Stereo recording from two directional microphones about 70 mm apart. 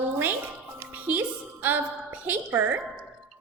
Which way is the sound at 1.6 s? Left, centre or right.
Right.